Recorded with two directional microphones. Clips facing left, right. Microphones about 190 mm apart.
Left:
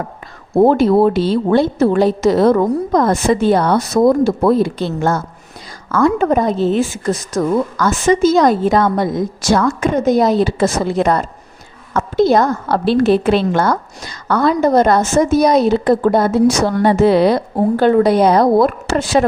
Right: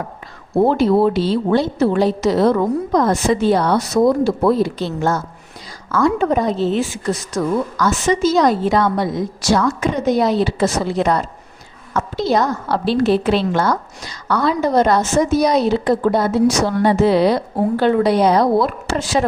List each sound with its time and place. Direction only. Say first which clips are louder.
0.5 s a woman's voice: left 3 dB; 50° left (ahead or behind)